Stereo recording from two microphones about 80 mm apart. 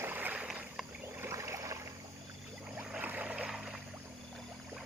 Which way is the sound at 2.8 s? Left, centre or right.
Centre.